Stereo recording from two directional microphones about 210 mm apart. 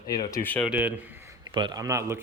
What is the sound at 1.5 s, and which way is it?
Speech, 20° right (ahead or behind).